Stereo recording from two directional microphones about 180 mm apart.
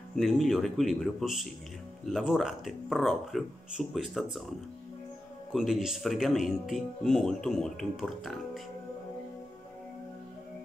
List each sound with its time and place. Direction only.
0.1 s speech: centre (ahead or behind)
5.5 s speech: centre (ahead or behind)